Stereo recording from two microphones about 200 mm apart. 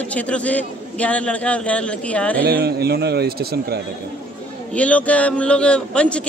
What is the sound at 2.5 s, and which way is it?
A man's voice, 50° right (ahead or behind).